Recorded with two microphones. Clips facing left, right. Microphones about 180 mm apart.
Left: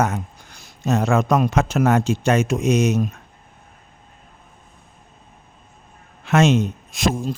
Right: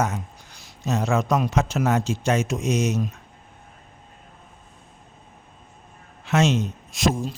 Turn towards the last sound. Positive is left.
turn(degrees=55)  # may be behind; listen again after turning